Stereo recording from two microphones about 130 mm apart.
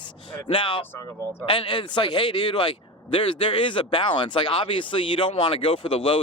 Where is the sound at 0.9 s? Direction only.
20° left (ahead or behind).